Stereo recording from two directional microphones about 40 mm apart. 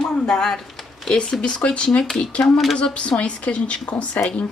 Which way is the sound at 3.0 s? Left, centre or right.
Left.